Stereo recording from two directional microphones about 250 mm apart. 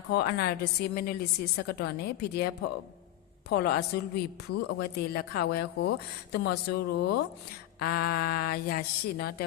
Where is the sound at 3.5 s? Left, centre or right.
Left.